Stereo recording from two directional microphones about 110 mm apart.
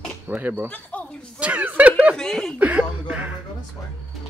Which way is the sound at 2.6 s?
10° right (ahead or behind).